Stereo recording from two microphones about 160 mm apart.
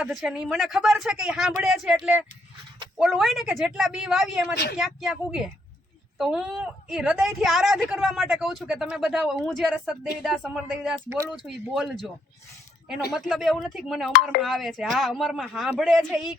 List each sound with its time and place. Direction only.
0.0 s speech: 5° right (ahead or behind)
4.5 s speech: 90° left
4.8 s speech: centre (ahead or behind)